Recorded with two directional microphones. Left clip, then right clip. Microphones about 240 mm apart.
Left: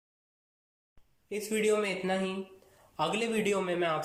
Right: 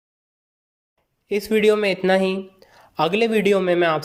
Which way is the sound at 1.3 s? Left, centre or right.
Right.